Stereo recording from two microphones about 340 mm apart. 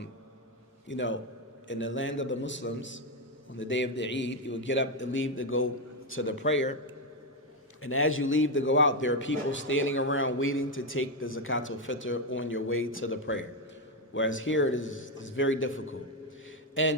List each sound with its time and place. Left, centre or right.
0.9 s a man's voice: left
7.8 s a man's voice: left